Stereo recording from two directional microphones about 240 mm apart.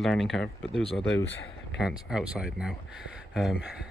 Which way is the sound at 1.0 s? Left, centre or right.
Left.